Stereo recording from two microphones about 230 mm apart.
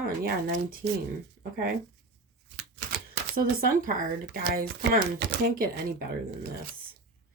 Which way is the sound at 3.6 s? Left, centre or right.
Right.